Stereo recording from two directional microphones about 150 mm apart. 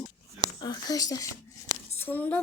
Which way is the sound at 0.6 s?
25° left (ahead or behind).